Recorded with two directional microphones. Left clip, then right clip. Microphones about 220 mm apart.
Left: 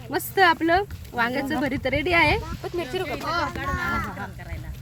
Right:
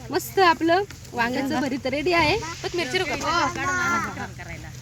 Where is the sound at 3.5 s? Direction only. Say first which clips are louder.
Right 4 dB; 50° left (ahead or behind).